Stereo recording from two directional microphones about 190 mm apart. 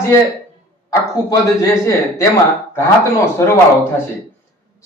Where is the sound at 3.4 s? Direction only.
15° left (ahead or behind).